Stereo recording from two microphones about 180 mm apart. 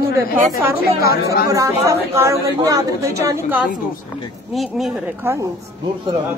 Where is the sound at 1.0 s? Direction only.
60° left (ahead or behind).